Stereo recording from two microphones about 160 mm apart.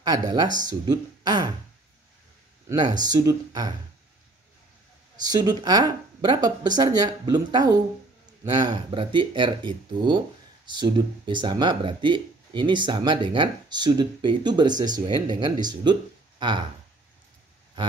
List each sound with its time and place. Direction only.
0.0 s speech: 25° right (ahead or behind)
3.0 s speech: 25° right (ahead or behind)
5.2 s speech: 25° right (ahead or behind)